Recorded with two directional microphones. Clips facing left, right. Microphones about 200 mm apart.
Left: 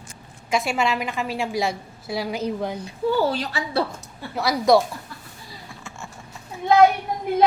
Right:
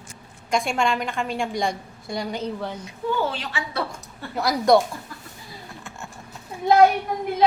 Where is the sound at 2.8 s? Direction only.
35° left (ahead or behind).